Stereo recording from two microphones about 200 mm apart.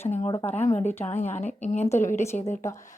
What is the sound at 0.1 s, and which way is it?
Speech, 25° left (ahead or behind).